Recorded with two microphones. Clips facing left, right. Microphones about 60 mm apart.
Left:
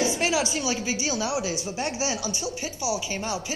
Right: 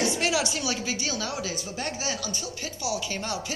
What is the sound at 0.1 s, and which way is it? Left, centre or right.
A woman's voice, centre.